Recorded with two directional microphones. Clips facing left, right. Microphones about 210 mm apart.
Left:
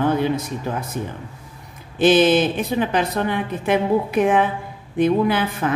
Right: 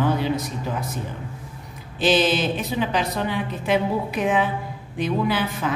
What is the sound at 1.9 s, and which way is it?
A woman's voice, 55° left (ahead or behind).